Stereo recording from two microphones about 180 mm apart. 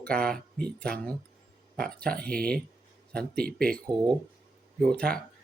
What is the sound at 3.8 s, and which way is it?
Speech, 25° right (ahead or behind).